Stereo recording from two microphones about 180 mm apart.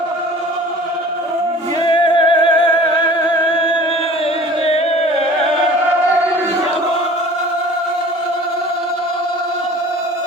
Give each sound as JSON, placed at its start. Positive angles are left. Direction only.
{"t": 1.9, "sound": "music", "side_deg": 25}